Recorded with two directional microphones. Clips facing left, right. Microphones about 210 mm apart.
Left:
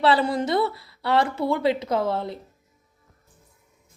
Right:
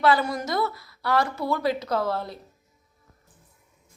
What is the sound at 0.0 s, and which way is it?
Speech, 30° left (ahead or behind).